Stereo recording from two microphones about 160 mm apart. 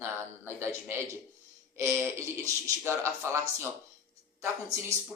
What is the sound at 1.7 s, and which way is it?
A man's voice, 15° right (ahead or behind).